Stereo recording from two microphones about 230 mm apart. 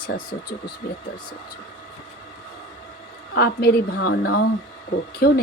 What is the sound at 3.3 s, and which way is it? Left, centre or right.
A woman's voice, left.